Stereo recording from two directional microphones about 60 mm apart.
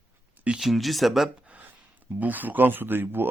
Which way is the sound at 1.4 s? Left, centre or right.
Right.